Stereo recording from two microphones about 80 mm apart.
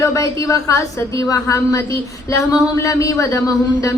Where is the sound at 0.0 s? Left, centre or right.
Left.